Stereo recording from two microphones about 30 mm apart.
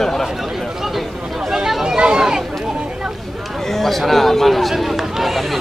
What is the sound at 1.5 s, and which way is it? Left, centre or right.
Chatter, centre.